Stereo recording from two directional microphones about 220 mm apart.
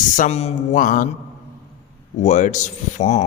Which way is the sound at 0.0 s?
35° left (ahead or behind).